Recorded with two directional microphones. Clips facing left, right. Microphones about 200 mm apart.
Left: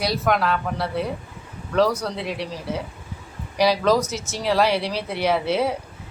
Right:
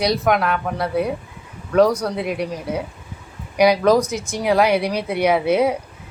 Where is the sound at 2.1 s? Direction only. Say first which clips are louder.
Right 5 dB; 50° right (ahead or behind).